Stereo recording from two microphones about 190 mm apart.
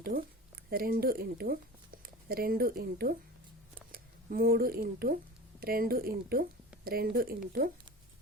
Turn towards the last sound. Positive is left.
turn(degrees=-50)  # may be behind; listen again after turning